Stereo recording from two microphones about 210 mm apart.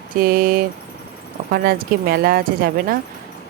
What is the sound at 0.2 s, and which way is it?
Speech, 45° right (ahead or behind).